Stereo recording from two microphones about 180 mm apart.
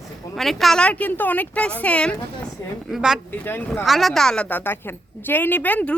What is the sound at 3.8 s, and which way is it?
Speech, centre (ahead or behind).